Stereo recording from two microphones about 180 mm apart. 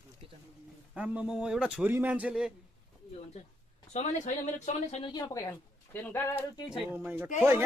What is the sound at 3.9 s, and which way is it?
Speech, 40° left (ahead or behind).